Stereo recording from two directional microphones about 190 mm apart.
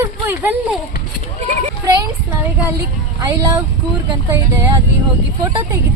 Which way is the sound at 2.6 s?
15° right (ahead or behind).